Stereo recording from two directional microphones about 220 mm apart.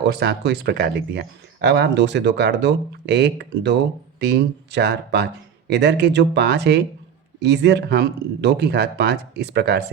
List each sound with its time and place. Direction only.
0.1 s speech: 50° right (ahead or behind)